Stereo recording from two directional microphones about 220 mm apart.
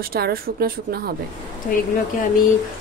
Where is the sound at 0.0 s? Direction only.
45° right (ahead or behind).